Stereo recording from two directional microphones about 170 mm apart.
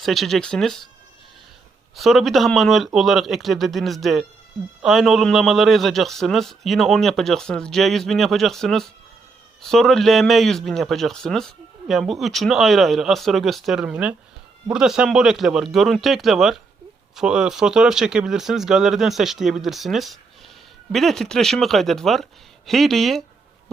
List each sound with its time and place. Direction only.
0.0 s a man's voice: centre (ahead or behind)
2.0 s a man's voice: centre (ahead or behind)